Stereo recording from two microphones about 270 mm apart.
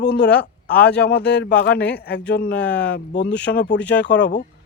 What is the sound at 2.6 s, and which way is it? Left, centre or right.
Speech, centre.